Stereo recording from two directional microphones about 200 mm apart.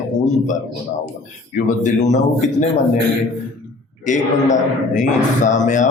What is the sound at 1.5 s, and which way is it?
Speech, 40° left (ahead or behind).